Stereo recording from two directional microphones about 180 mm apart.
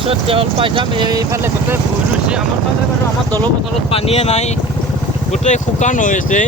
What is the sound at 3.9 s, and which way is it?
Speech, 35° left (ahead or behind).